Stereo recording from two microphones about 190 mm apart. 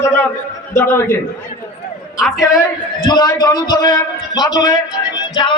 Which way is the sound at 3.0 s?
20° left (ahead or behind).